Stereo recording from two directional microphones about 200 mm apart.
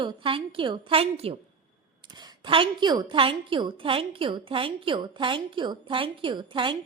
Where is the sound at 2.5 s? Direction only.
25° right (ahead or behind).